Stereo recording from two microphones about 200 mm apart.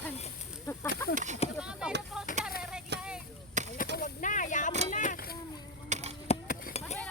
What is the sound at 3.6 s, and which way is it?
Chop, 40° right (ahead or behind).